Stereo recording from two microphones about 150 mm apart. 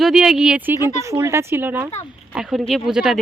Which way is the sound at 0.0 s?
5° right (ahead or behind).